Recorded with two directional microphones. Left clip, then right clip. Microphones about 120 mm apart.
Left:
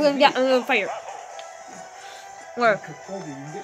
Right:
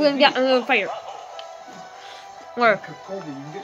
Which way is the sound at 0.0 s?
10° left (ahead or behind).